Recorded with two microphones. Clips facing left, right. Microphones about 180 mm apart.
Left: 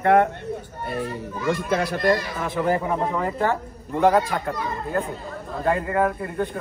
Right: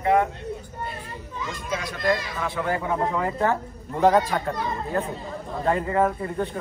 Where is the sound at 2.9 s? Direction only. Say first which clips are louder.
Left 1 dB; centre (ahead or behind).